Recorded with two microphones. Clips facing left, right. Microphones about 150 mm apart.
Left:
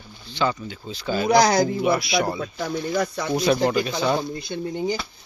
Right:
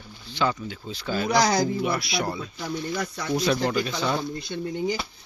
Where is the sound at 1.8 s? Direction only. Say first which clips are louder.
Left 5 dB; 10° left (ahead or behind).